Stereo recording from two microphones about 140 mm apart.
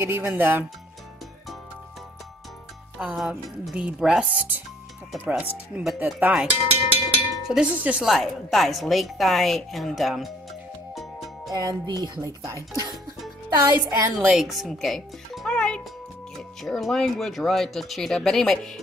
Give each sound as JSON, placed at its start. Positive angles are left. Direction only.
{"t": 0.0, "sound": "speech", "side_deg": -15}
{"t": 3.0, "sound": "speech", "side_deg": -10}
{"t": 7.4, "sound": "speech", "side_deg": -5}
{"t": 11.0, "sound": "music", "side_deg": 0}
{"t": 11.5, "sound": "speech", "side_deg": -30}
{"t": 14.3, "sound": "a child's voice", "side_deg": 0}